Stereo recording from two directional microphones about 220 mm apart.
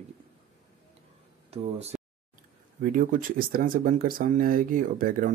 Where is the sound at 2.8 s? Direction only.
40° right (ahead or behind).